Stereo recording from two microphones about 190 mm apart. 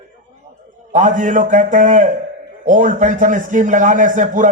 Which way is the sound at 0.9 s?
40° right (ahead or behind).